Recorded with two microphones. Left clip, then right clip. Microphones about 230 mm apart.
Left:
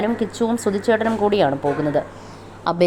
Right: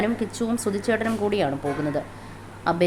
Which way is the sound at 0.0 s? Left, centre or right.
Centre.